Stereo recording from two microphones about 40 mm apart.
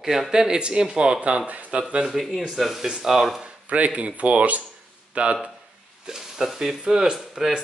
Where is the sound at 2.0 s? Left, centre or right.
Centre.